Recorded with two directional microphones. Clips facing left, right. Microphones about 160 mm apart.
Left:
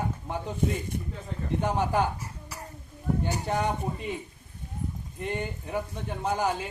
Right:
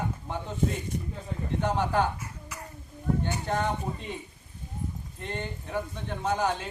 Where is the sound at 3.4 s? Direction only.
10° left (ahead or behind).